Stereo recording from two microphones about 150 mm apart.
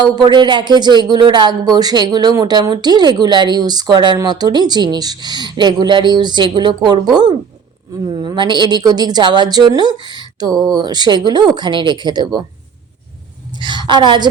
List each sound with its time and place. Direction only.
0.0 s speech: 30° right (ahead or behind)
13.6 s a woman's voice: 30° right (ahead or behind)